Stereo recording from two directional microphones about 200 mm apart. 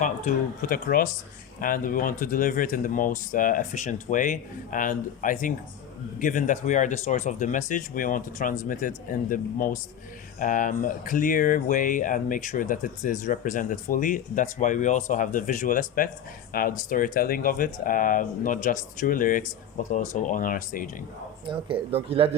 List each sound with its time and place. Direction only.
0.0 s speech: 40° left (ahead or behind)
21.4 s speech: 25° right (ahead or behind)